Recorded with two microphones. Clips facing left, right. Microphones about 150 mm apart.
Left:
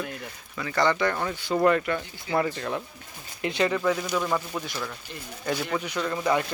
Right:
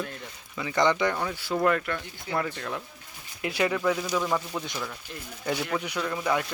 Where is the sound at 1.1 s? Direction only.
5° right (ahead or behind).